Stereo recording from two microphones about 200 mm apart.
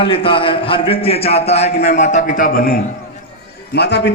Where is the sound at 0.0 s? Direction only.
25° left (ahead or behind); by 2.7 s 45° left (ahead or behind).